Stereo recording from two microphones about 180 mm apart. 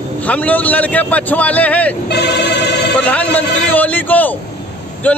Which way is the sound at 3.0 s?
10° left (ahead or behind).